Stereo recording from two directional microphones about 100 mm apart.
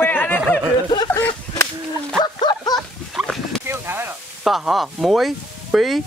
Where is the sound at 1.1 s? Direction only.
20° left (ahead or behind).